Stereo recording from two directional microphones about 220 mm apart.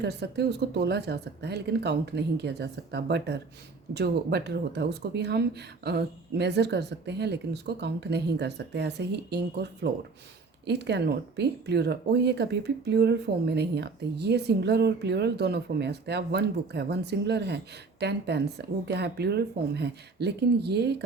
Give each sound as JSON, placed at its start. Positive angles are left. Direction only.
{"t": 0.0, "sound": "speech", "side_deg": -50}